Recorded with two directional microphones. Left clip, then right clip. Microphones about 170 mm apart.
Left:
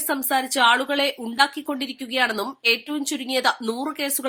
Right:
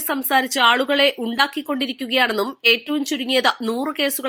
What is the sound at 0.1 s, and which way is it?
A woman's voice, 15° right (ahead or behind).